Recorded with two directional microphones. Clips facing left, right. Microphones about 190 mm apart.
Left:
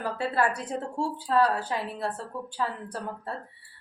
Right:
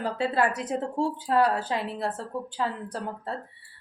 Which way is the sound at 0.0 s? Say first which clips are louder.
Right 2 dB; 20° right (ahead or behind).